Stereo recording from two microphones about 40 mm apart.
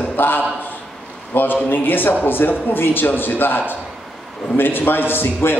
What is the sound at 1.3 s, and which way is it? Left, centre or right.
A man's voice, left.